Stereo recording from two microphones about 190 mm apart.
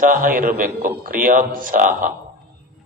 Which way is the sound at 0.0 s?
45° right (ahead or behind).